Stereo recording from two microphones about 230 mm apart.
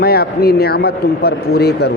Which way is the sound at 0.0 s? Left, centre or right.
Left.